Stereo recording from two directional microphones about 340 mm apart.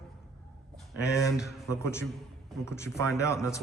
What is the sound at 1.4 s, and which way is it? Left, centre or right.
A man's voice, centre.